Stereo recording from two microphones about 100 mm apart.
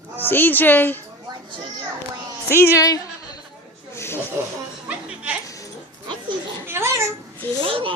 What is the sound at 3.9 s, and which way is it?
Snake, 25° left (ahead or behind).